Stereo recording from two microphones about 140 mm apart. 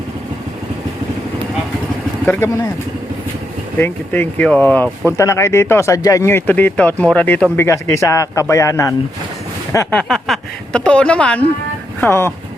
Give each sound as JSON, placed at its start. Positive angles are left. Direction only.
{"t": 2.2, "sound": "speech", "side_deg": 15}
{"t": 3.8, "sound": "a man's voice", "side_deg": 15}
{"t": 9.9, "sound": "speech", "side_deg": 5}